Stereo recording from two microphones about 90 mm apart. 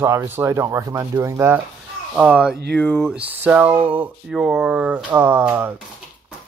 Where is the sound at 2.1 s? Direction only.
10° right (ahead or behind).